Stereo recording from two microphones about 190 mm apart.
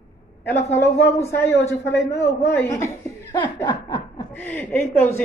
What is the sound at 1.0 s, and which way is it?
Speech, 15° left (ahead or behind).